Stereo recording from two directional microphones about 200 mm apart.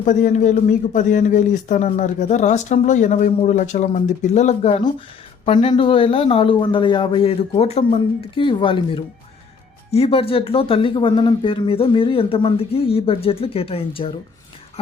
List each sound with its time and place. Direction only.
0.0 s a man's voice: 40° left (ahead or behind)